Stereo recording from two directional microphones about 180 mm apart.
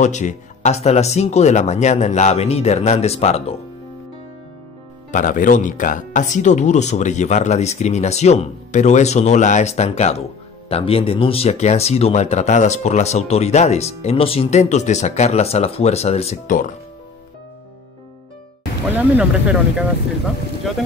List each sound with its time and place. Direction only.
0.0 s speech: 40° left (ahead or behind)
5.1 s speech: 45° left (ahead or behind)
18.9 s speech: 10° right (ahead or behind)